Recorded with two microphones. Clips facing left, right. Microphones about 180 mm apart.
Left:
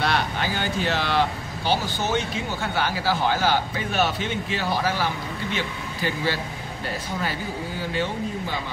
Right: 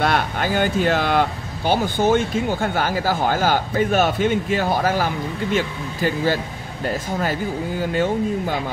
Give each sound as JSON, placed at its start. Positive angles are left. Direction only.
{"t": 0.0, "sound": "speech", "side_deg": -50}
{"t": 7.8, "sound": "speech", "side_deg": -50}